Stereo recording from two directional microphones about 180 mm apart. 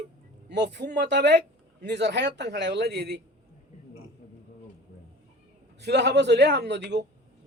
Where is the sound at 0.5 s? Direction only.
70° right (ahead or behind).